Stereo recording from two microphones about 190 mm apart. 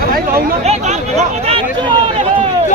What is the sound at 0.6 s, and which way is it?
Speech, 35° right (ahead or behind).